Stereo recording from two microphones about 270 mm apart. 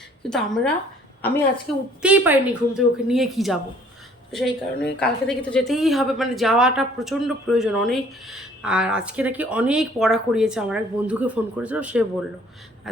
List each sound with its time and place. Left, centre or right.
0.2 s a woman's voice: centre
2.0 s a woman's voice: centre